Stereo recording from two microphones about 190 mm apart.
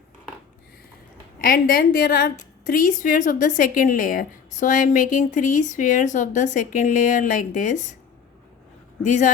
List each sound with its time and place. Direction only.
1.4 s a woman's voice: 50° left (ahead or behind)
9.0 s speech: 40° left (ahead or behind)